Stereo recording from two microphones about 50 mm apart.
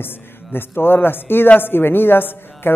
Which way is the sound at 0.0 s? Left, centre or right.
Left.